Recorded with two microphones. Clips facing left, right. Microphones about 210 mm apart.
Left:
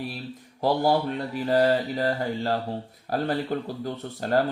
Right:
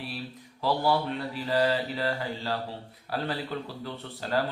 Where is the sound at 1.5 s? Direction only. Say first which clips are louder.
Left 5 dB; 50° left (ahead or behind).